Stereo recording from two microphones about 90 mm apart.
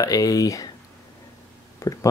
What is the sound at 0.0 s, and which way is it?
Speech, 40° left (ahead or behind).